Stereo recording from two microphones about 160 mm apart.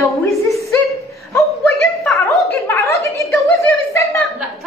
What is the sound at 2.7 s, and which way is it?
Speech, 20° left (ahead or behind).